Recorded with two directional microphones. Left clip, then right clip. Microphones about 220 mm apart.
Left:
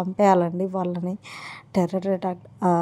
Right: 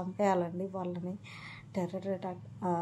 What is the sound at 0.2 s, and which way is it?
A woman's voice, 40° left (ahead or behind).